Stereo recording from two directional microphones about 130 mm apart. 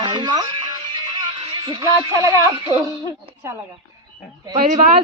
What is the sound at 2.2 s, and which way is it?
Speech, 30° right (ahead or behind).